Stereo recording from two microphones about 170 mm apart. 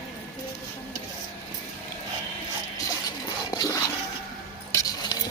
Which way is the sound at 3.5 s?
20° left (ahead or behind).